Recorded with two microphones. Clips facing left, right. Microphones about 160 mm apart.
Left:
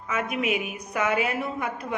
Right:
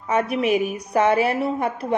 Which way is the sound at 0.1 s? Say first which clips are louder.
Right 7 dB; 35° right (ahead or behind).